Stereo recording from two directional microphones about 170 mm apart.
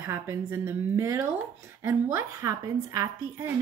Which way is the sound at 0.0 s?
15° right (ahead or behind).